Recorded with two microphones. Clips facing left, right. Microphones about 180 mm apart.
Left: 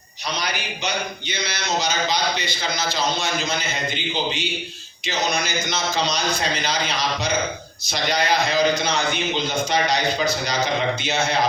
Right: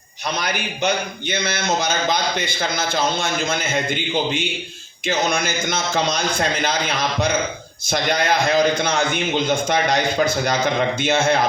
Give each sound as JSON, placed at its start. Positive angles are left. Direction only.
{"t": 0.3, "sound": "a man's voice", "side_deg": -50}
{"t": 5.0, "sound": "a man's voice", "side_deg": -50}